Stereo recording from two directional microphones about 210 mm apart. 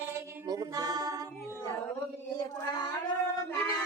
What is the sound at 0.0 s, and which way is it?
Music, 15° right (ahead or behind).